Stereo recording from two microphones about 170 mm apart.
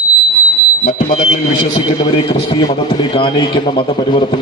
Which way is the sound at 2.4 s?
30° left (ahead or behind).